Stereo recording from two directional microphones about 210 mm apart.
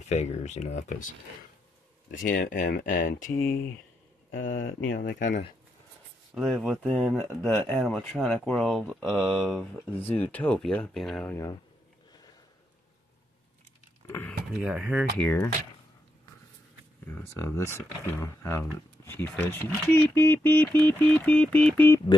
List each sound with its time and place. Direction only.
0.0 s speech: 35° left (ahead or behind)
2.0 s speech: 40° left (ahead or behind)
4.6 s speech: 65° left (ahead or behind)
4.9 s speech: 40° left (ahead or behind)
6.3 s speech: 5° right (ahead or behind)
14.0 s speech: 10° left (ahead or behind)
14.6 s speech: 5° right (ahead or behind)
15.1 s speech: 10° left (ahead or behind)
17.1 s speech: 10° left (ahead or behind)